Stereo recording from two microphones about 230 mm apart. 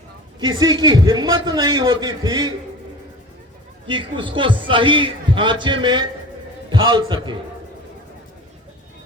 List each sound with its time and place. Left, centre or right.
0.3 s a man's voice: centre
3.8 s a man's voice: right